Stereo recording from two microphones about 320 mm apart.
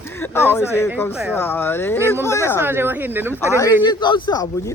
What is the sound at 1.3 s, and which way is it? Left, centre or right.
Speech, centre.